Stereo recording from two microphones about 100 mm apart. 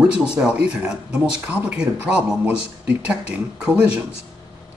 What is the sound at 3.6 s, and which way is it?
Speech, 15° right (ahead or behind).